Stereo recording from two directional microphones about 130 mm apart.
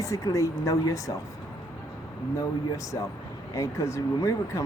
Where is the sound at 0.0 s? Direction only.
25° left (ahead or behind).